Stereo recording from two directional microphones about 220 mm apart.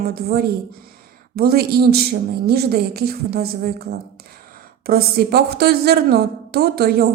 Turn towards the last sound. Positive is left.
turn(degrees=-45)  # may be behind; listen again after turning